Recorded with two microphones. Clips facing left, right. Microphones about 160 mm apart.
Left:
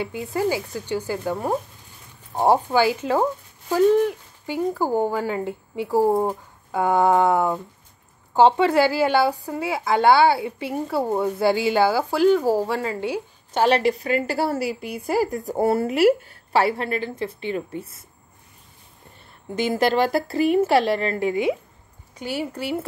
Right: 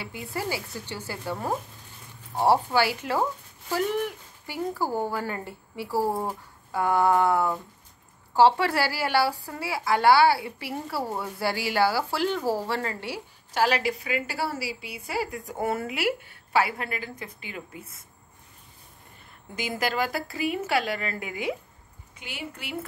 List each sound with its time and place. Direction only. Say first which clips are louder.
0.0 s a woman's voice: left 9 dB; 20° left (ahead or behind)
13.7 s a woman's voice: left 7 dB; 40° left (ahead or behind)
19.7 s a woman's voice: left 8 dB; 40° left (ahead or behind)
22.2 s a woman's voice: left 11 dB; 40° left (ahead or behind)